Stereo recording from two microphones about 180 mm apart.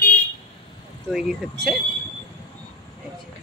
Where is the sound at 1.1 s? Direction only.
Centre (ahead or behind).